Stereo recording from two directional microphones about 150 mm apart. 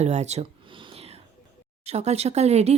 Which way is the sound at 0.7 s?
35° right (ahead or behind).